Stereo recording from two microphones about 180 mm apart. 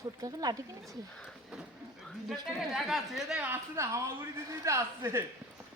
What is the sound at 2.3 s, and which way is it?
A woman's voice, centre (ahead or behind).